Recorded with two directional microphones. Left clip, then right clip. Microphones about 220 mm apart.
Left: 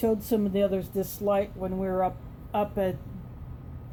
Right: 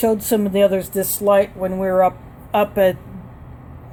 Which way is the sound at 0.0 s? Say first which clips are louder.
Right 8 dB; 30° right (ahead or behind).